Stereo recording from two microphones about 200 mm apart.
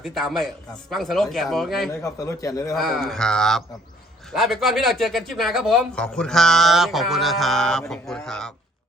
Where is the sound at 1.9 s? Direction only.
15° left (ahead or behind).